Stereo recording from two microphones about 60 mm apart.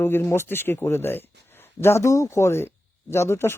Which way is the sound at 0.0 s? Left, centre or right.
Left.